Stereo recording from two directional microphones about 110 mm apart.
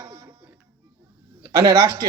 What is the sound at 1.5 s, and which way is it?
Speech, 35° right (ahead or behind).